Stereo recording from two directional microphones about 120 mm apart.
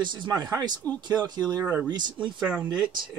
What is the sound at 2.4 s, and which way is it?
Speech, 10° right (ahead or behind).